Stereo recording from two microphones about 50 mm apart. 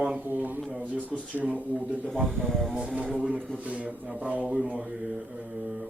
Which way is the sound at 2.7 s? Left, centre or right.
Centre.